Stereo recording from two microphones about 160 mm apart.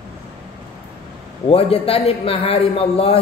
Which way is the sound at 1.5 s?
35° left (ahead or behind).